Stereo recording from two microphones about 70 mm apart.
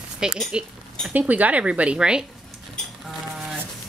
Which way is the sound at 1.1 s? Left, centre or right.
Right.